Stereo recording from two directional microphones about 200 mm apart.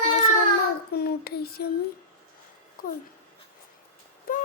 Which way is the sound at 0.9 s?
50° left (ahead or behind).